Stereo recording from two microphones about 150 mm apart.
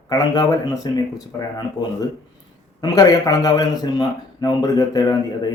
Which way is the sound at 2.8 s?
25° left (ahead or behind).